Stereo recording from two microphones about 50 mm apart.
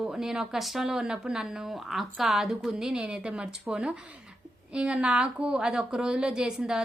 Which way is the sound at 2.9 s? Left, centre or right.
Right.